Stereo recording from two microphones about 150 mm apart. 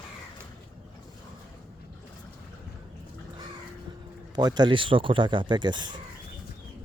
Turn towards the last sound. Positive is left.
turn(degrees=-30)  # may be behind; listen again after turning